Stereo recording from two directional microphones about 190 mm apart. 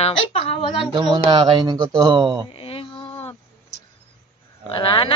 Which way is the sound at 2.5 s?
30° left (ahead or behind).